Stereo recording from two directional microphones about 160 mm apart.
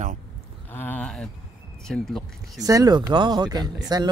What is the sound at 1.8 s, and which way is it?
Speech, centre (ahead or behind).